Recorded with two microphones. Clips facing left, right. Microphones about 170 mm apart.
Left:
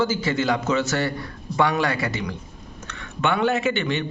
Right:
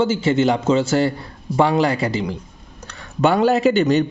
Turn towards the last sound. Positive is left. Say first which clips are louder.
# right 8 dB
turn(degrees=-40)  # may be behind; listen again after turning